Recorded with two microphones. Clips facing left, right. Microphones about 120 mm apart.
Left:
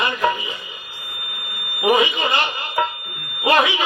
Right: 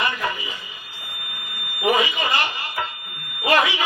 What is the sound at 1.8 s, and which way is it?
Smoke detector, 25° left (ahead or behind).